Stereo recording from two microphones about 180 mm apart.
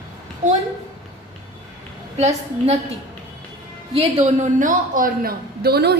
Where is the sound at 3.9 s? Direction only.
35° right (ahead or behind); by 5.9 s 65° right (ahead or behind).